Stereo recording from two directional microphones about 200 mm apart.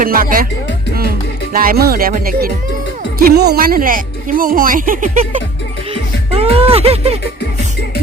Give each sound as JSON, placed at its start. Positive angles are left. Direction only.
{"t": 0.0, "sound": "speech", "side_deg": -45}
{"t": 1.5, "sound": "speech", "side_deg": -50}
{"t": 5.9, "sound": "music", "side_deg": -30}